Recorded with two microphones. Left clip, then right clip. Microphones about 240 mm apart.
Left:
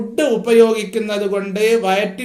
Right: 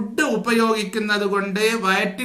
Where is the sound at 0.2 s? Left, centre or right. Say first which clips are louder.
Left 7 dB; centre.